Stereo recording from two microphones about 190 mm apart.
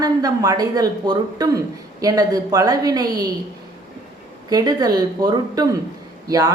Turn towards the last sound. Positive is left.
turn(degrees=-20)  # may be behind; listen again after turning